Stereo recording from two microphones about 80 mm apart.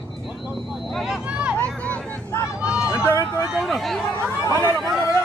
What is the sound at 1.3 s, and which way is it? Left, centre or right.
Vehicle, centre.